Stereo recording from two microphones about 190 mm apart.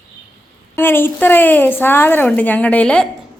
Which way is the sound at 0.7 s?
10° left (ahead or behind).